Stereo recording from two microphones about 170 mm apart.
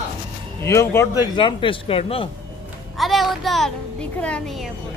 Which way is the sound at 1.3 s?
30° left (ahead or behind).